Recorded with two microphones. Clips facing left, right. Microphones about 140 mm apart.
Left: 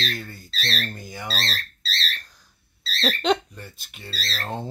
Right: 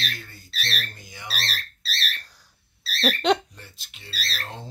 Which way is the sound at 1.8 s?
10° right (ahead or behind).